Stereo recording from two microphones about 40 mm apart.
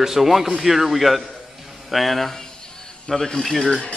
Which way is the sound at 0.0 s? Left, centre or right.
Centre.